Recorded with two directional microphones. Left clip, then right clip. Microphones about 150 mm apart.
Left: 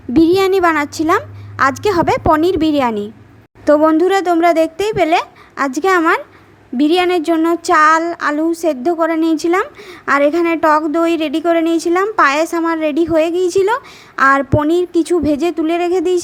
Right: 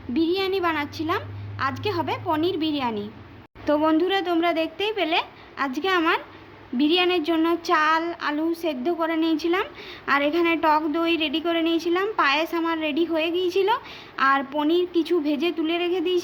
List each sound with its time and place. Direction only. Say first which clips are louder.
0.1 s a woman's voice: left 12 dB; 65° left (ahead or behind)
3.7 s a woman's voice: left 10 dB; 45° left (ahead or behind)